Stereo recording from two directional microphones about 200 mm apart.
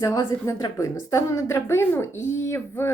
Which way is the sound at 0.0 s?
15° left (ahead or behind).